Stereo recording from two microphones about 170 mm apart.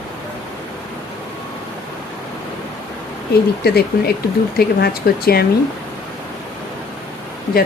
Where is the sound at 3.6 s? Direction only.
65° left (ahead or behind).